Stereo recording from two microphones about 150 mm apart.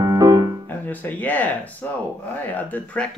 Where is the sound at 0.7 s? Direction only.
10° left (ahead or behind).